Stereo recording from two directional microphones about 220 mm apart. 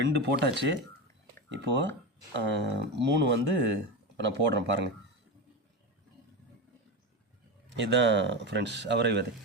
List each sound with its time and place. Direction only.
0.0 s speech: 50° right (ahead or behind)
7.7 s speech: 55° right (ahead or behind)